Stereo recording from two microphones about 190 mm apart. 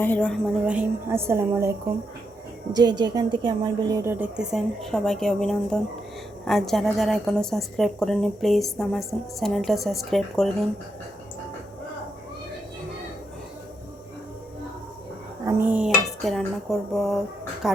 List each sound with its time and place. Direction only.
0.0 s a woman's voice: 10° left (ahead or behind)
0.6 s a woman's voice: 5° right (ahead or behind)
3.0 s a woman's voice: 25° right (ahead or behind)
4.0 s a woman's voice: 10° right (ahead or behind)
15.4 s speech: 10° right (ahead or behind)